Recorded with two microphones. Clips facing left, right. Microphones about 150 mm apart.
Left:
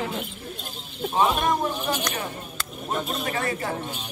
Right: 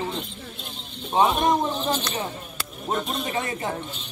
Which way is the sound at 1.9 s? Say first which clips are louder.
Right 1 dB; 10° left (ahead or behind).